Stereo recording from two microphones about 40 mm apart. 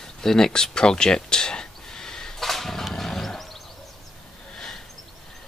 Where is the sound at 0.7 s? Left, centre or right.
Centre.